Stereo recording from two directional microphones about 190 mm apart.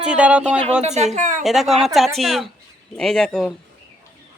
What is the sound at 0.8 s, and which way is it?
Speech, 35° right (ahead or behind).